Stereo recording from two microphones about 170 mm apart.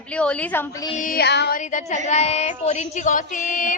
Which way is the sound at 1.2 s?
85° left.